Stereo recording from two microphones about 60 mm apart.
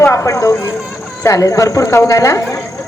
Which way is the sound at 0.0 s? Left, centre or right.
Left.